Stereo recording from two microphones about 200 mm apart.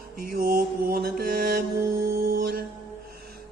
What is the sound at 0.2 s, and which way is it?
Mantra, 45° right (ahead or behind).